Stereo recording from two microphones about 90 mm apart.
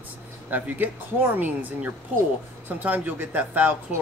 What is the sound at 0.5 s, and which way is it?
Speech, 20° right (ahead or behind).